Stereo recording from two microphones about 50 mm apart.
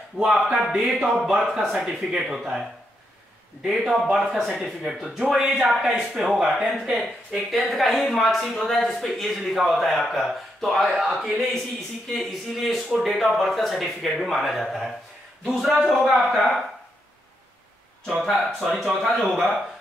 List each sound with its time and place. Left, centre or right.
0.3 s speech: centre
1.1 s a man's voice: centre
3.9 s a man's voice: centre
18.2 s a man's voice: centre